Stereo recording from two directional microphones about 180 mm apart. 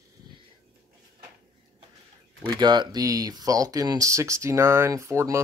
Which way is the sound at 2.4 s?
25° right (ahead or behind).